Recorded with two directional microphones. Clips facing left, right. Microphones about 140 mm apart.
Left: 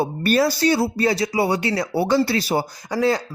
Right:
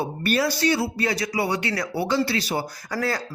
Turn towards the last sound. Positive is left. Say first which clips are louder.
# left 6 dB
turn(degrees=20)  # may be behind; listen again after turning